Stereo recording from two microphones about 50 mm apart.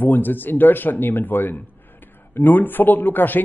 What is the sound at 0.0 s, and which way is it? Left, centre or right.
Speech, left.